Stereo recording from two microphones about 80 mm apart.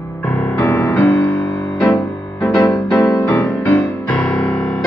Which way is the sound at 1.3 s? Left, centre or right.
Left.